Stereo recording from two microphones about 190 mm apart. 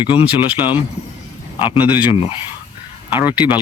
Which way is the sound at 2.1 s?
30° left (ahead or behind).